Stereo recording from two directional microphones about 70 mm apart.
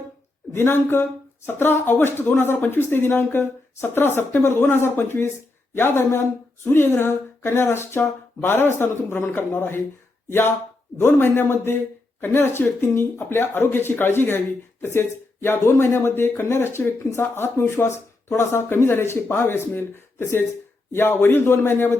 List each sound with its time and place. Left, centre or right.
0.5 s speech: left